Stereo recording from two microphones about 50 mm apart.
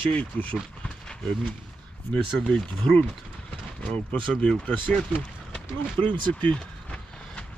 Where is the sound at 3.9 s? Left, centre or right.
Left.